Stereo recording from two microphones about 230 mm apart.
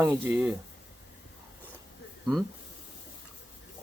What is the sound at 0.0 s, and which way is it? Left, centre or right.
Speech, centre.